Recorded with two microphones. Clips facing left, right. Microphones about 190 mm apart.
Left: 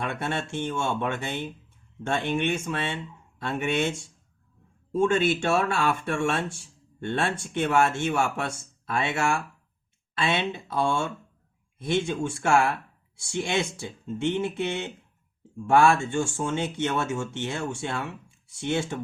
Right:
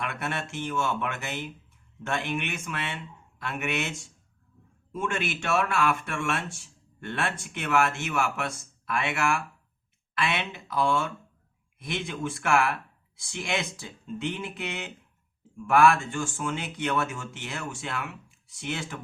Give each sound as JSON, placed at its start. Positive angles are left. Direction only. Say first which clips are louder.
{"t": 0.0, "sound": "speech", "louder": "left 3 dB", "side_deg": 30}